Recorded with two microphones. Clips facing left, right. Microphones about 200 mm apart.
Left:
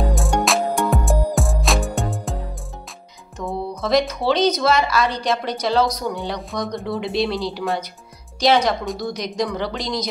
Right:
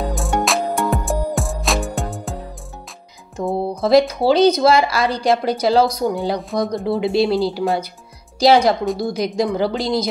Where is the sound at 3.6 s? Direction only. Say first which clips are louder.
Right 6 dB; 30° right (ahead or behind).